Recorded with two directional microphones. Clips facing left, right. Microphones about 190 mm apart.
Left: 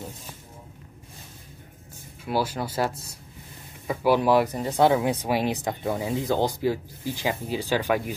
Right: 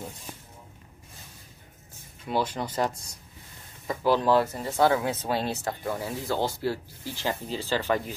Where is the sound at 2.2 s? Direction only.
5° left (ahead or behind).